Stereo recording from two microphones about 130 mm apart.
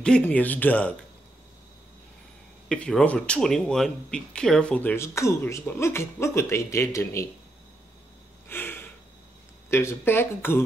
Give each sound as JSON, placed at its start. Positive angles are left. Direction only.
{"t": 0.0, "sound": "speech", "side_deg": 10}
{"t": 2.7, "sound": "speech", "side_deg": 5}
{"t": 8.5, "sound": "a sound", "side_deg": 15}
{"t": 9.7, "sound": "speech", "side_deg": 20}